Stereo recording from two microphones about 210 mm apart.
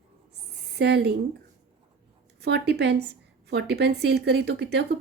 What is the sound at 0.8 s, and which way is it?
Speech, 50° right (ahead or behind).